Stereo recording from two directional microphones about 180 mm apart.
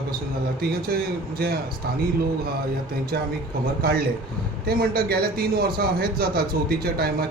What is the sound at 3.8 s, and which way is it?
A man's voice, 60° right (ahead or behind).